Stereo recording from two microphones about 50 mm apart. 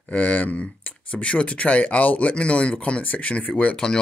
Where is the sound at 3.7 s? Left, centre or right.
Centre.